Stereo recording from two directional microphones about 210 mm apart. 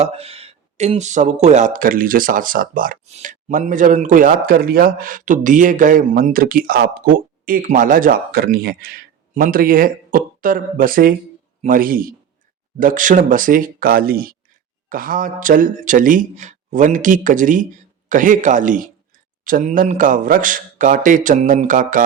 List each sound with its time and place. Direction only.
0.0 s speech: 30° right (ahead or behind)